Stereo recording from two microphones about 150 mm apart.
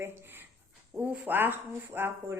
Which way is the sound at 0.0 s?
15° right (ahead or behind).